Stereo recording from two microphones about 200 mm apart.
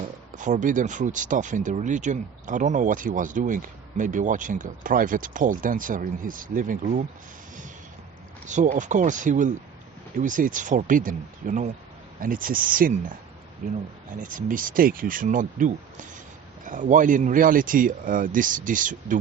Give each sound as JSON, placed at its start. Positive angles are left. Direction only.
{"t": 0.3, "sound": "speech", "side_deg": -40}
{"t": 8.4, "sound": "speech", "side_deg": -40}